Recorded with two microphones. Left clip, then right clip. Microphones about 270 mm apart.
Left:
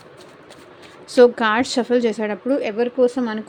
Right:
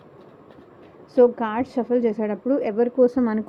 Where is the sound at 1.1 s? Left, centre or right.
Centre.